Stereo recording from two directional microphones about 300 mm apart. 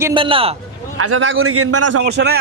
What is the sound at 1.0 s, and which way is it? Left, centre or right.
A man's voice, right.